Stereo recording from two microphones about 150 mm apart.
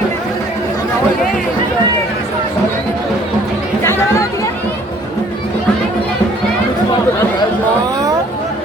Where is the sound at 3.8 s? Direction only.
15° left (ahead or behind).